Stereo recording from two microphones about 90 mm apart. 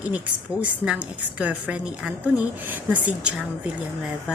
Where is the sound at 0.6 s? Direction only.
15° right (ahead or behind).